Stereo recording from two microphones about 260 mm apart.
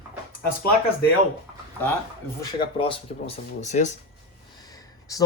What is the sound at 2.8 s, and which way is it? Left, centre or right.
Speech, left.